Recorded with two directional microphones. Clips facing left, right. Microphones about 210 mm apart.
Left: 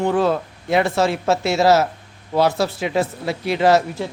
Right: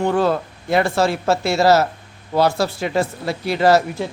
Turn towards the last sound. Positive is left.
turn(degrees=0)  # may be behind; listen again after turning